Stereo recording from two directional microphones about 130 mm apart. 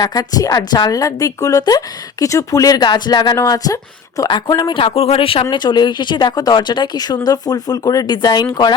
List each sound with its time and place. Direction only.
0.0 s a woman's voice: 30° left (ahead or behind)